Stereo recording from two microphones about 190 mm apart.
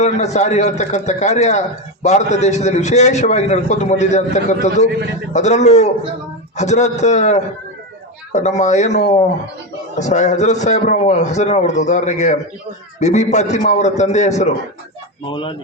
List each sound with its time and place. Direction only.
0.0 s a man's voice: 35° left (ahead or behind)
15.3 s speech: 25° left (ahead or behind)